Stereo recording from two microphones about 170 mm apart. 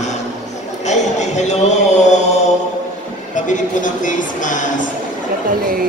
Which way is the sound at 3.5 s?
50° left (ahead or behind).